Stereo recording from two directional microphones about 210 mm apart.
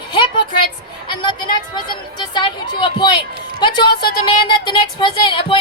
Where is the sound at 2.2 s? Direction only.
20° left (ahead or behind).